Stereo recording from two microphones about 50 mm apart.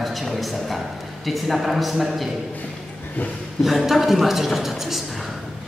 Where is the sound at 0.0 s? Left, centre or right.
Centre.